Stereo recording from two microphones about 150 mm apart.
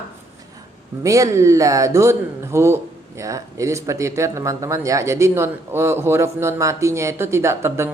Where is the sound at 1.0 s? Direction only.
20° right (ahead or behind).